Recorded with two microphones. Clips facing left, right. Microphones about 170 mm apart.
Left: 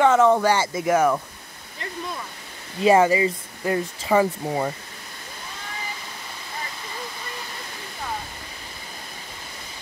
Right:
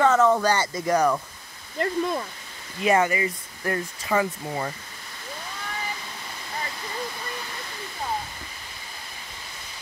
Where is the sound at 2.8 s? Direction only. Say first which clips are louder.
Left 5 dB; 25° left (ahead or behind).